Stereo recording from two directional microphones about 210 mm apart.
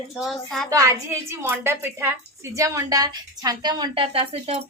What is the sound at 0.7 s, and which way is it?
A woman's voice, 15° right (ahead or behind).